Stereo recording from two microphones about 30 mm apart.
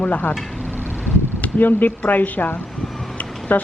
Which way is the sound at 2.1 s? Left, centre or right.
Left.